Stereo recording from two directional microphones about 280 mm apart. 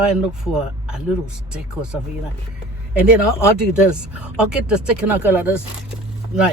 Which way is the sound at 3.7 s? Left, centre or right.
Centre.